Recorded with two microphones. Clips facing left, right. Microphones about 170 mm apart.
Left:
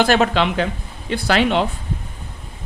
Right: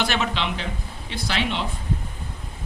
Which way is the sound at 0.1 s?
50° left (ahead or behind).